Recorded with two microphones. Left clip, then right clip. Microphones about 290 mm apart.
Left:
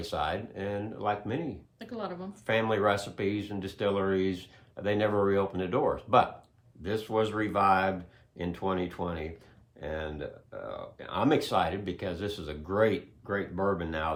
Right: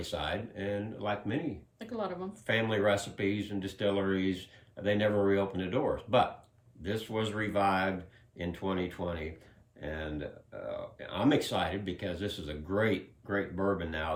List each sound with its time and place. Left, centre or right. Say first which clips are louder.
0.0 s speech: left 3 dB; centre
1.8 s a woman's voice: right 1 dB; centre
2.5 s speech: left 2 dB; centre